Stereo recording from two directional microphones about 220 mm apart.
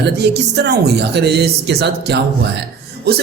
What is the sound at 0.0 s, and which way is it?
A man's voice, 50° right (ahead or behind).